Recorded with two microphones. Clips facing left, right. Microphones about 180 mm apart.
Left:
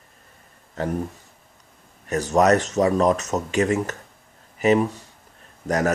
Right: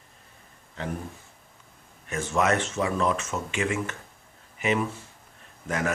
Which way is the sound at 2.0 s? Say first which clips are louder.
Left 7 dB; 40° left (ahead or behind).